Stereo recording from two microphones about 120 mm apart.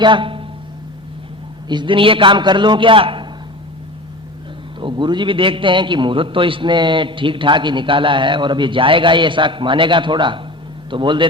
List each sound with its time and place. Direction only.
0.0 s speech: 45° right (ahead or behind)
1.6 s a man's voice: 40° right (ahead or behind)
4.8 s a man's voice: 40° right (ahead or behind)